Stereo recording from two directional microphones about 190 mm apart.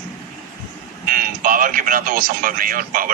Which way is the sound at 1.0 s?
45° right (ahead or behind).